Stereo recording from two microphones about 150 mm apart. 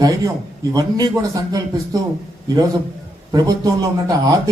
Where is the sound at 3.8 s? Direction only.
20° right (ahead or behind).